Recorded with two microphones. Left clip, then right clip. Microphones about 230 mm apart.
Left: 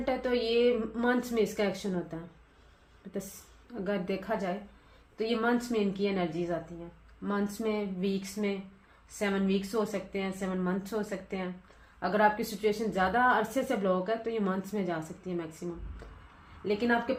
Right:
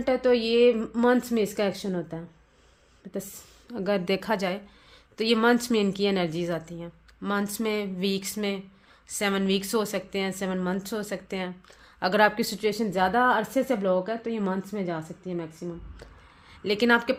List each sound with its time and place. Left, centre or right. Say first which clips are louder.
0.0 s a woman's voice: right 7 dB; right
3.7 s a woman's voice: right 7 dB; right
16.6 s a woman's voice: right 6 dB; right